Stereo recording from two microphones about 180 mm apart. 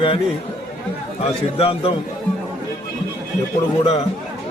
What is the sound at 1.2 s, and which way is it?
Speech, 30° left (ahead or behind).